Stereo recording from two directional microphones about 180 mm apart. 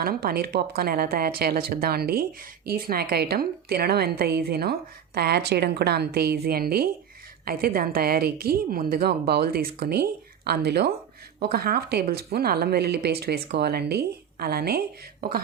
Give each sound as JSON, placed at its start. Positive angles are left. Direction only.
{"t": 0.0, "sound": "a woman's voice", "side_deg": -55}